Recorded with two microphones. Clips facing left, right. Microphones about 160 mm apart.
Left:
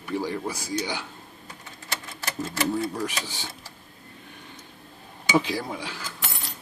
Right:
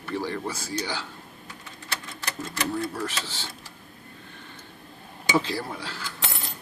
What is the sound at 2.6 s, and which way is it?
Speech, 15° left (ahead or behind).